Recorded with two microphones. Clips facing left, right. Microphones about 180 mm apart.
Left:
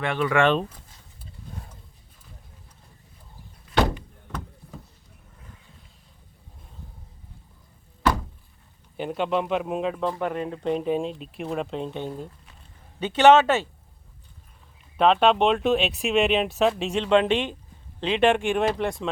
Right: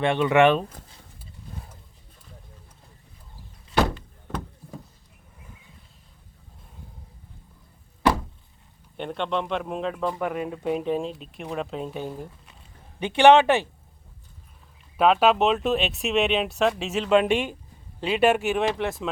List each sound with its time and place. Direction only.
0.0 s speech: 25° right (ahead or behind)
9.0 s speech: 5° left (ahead or behind)
10.1 s a man's voice: 5° right (ahead or behind)
14.9 s speech: 5° right (ahead or behind)